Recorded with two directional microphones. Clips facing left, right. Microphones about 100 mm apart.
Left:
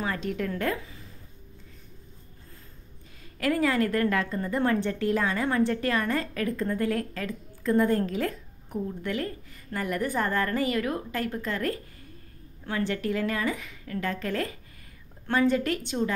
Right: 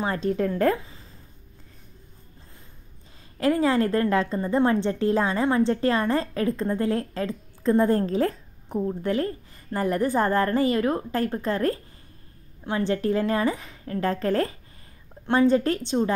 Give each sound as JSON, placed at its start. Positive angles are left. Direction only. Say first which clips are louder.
{"t": 0.0, "sound": "speech", "louder": "right 5 dB", "side_deg": -30}
{"t": 3.3, "sound": "a woman's voice", "louder": "right 4 dB", "side_deg": -30}